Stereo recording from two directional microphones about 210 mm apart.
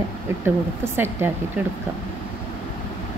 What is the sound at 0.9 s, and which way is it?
Speech, 10° right (ahead or behind).